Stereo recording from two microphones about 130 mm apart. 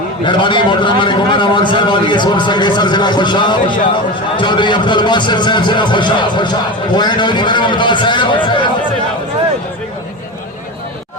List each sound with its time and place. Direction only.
0.3 s a man's voice: 40° left (ahead or behind)